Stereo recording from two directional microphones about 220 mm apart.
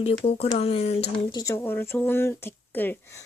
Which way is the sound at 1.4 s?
15° left (ahead or behind).